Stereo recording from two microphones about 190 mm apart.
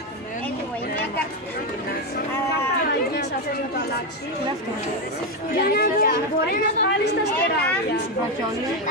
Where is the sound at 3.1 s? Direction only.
55° left (ahead or behind).